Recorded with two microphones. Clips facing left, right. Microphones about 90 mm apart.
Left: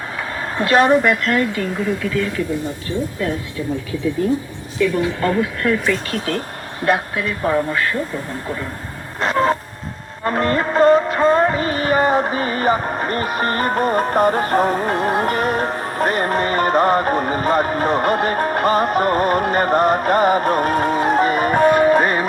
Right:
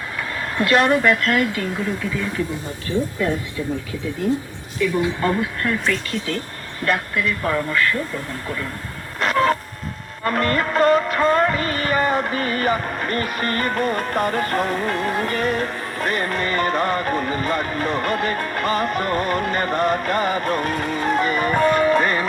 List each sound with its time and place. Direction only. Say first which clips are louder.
0.2 s vehicle: left 1 dB; 25° left (ahead or behind)
0.9 s speech: left 2 dB; 5° left (ahead or behind)
5.4 s speech: left 4 dB; centre (ahead or behind)
6.1 s a woman's voice: left 3 dB; 45° left (ahead or behind)
7.4 s speech: left 4 dB; 30° left (ahead or behind)
9.2 s a sound: left 1 dB; 30° left (ahead or behind)
10.2 s music: left 2 dB; 25° left (ahead or behind)
13.2 s speech: left 4 dB; 45° left (ahead or behind)
13.5 s music: left 3 dB; 30° left (ahead or behind)